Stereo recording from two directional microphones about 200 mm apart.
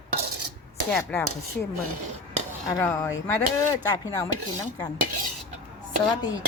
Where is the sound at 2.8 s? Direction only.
15° left (ahead or behind).